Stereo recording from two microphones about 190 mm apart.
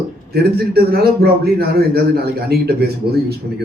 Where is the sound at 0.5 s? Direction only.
55° right (ahead or behind).